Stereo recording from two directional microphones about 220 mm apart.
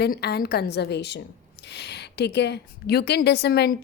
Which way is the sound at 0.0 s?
45° left (ahead or behind).